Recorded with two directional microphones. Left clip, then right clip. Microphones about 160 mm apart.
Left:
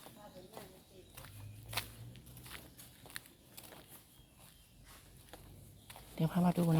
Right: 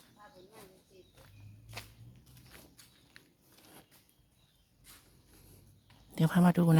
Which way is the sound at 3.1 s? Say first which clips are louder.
Left 8 dB; 90° left.